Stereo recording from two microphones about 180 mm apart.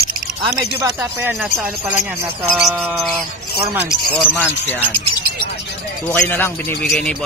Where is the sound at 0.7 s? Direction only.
10° right (ahead or behind).